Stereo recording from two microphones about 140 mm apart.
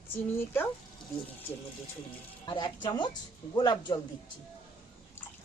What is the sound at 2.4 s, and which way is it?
Speech, 30° left (ahead or behind).